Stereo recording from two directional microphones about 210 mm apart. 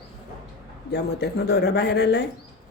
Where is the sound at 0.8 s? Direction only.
50° left (ahead or behind).